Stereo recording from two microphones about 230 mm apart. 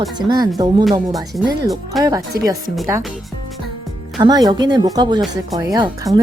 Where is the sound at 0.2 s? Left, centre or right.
Centre.